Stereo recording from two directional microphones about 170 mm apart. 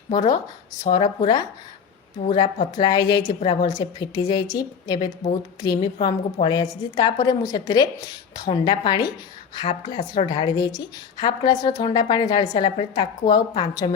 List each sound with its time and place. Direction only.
0.1 s a woman's voice: 25° left (ahead or behind)